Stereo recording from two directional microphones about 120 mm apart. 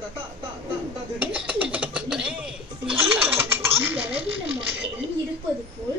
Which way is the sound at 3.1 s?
15° right (ahead or behind).